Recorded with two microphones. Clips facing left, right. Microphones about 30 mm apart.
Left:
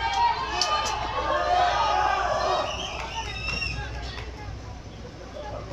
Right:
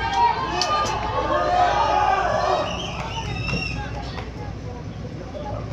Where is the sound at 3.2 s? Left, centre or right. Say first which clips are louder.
Right 3 dB; centre.